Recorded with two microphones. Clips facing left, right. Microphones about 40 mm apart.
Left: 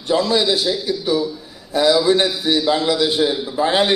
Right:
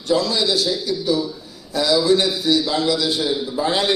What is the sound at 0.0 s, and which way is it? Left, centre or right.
A man's voice, left.